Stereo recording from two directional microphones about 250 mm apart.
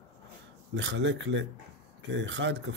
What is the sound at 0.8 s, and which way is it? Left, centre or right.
Speech, right.